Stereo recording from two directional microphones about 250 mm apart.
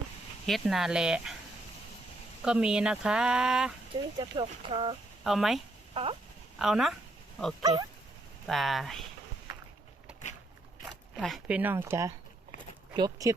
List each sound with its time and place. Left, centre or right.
0.4 s speech: centre
2.4 s speech: centre
4.2 s speech: centre
5.2 s speech: centre
5.9 s speech: right
6.6 s speech: centre
7.6 s speech: centre
8.4 s speech: centre
10.8 s speech: centre